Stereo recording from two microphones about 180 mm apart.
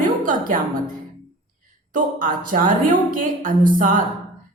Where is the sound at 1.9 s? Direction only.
50° right (ahead or behind).